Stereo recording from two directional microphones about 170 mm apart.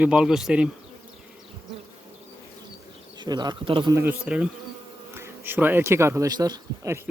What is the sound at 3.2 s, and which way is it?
Speech, 25° right (ahead or behind).